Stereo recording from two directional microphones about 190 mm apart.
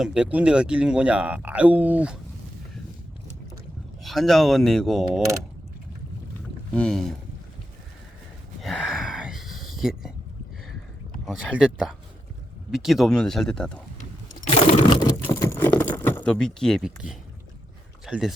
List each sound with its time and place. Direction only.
0.0 s speech: 5° right (ahead or behind)
4.0 s speech: centre (ahead or behind)
6.7 s speech: 5° left (ahead or behind)
8.6 s gasp: centre (ahead or behind)
11.3 s speech: 5° right (ahead or behind)
14.4 s computer keyboard: 35° left (ahead or behind)
15.2 s a sound: 15° left (ahead or behind); by 17.2 s 5° right (ahead or behind)
18.0 s speech: centre (ahead or behind)